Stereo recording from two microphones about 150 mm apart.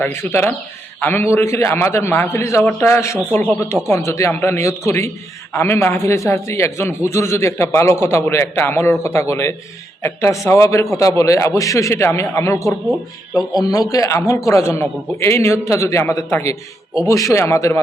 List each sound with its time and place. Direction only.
0.0 s a man's voice: 15° left (ahead or behind)
12.6 s speech: centre (ahead or behind)
13.7 s a man's voice: 25° left (ahead or behind)